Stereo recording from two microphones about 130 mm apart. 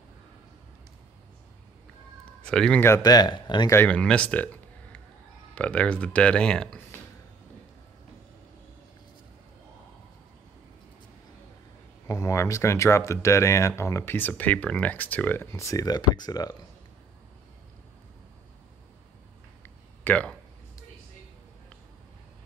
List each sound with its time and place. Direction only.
2.4 s speech: 5° left (ahead or behind)
2.8 s speech: 25° left (ahead or behind)
3.7 s speech: 10° left (ahead or behind)
12.1 s speech: 25° left (ahead or behind)
19.6 s a sound: 15° left (ahead or behind)